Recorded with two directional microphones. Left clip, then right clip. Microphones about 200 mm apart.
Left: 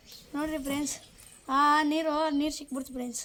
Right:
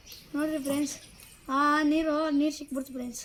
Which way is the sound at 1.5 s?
35° left (ahead or behind).